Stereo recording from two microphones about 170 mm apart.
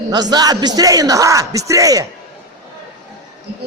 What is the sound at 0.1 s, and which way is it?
A man's voice, 25° right (ahead or behind).